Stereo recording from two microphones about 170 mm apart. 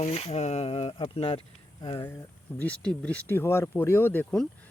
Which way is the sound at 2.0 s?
15° left (ahead or behind).